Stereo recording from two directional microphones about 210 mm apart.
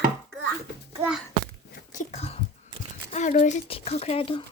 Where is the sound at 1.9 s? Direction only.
30° left (ahead or behind).